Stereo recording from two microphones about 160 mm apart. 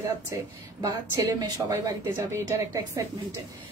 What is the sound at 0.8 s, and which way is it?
Speech, 20° right (ahead or behind).